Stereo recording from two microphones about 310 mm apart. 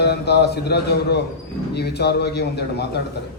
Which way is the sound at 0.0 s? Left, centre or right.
Left.